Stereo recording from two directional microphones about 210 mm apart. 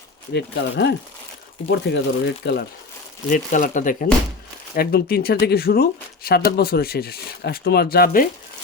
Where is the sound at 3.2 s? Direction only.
40° left (ahead or behind).